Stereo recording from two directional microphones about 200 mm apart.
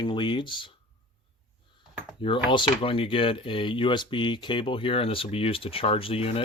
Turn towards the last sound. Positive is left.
turn(degrees=30)  # may be behind; listen again after turning